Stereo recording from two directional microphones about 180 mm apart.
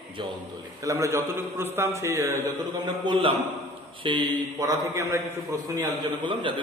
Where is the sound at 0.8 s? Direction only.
15° right (ahead or behind).